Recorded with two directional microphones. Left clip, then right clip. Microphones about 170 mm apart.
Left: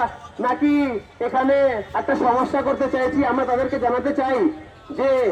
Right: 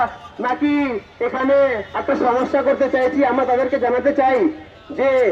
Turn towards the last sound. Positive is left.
turn(degrees=15)  # may be behind; listen again after turning